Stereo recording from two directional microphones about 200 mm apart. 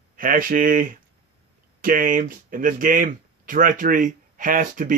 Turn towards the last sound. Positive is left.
turn(degrees=-40)  # may be behind; listen again after turning